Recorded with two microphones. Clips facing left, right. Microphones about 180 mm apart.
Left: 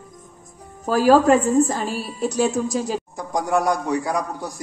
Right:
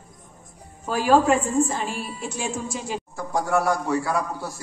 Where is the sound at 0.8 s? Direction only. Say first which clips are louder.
Left 4 dB; 40° left (ahead or behind).